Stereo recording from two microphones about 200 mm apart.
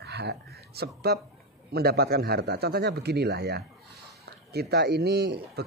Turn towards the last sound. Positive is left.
turn(degrees=-55)  # may be behind; listen again after turning